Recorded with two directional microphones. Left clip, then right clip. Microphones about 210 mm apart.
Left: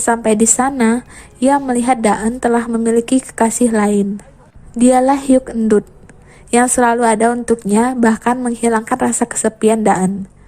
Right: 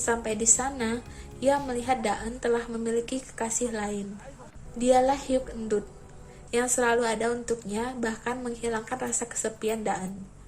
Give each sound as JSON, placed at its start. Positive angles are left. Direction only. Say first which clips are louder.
{"t": 0.0, "sound": "a woman's voice", "louder": "left 14 dB", "side_deg": 45}